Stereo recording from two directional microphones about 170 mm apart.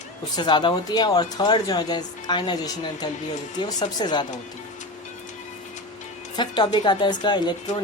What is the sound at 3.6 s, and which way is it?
Speech, 25° left (ahead or behind).